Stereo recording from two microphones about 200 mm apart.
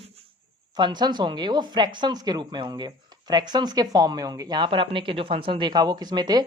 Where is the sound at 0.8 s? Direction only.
20° right (ahead or behind).